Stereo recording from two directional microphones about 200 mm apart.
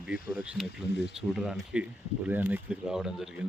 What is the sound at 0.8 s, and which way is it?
Speech, 60° left (ahead or behind).